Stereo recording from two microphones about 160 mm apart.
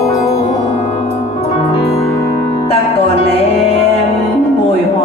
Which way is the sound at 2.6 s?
40° left (ahead or behind).